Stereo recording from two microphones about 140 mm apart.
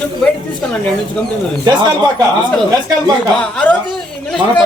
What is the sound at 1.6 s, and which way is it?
Speech, 30° right (ahead or behind).